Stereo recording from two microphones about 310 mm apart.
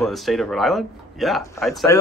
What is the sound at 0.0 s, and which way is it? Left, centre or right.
Speech, centre.